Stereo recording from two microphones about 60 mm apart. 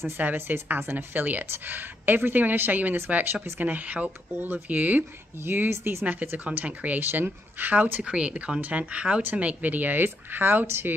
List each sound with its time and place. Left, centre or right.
0.2 s a woman's voice: right
6.0 s speech: right
8.0 s speech: centre; by 11.0 s right